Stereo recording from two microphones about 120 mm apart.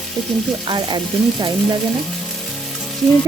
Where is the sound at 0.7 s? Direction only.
40° right (ahead or behind).